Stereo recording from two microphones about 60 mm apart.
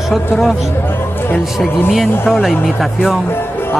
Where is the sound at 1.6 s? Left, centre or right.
Centre.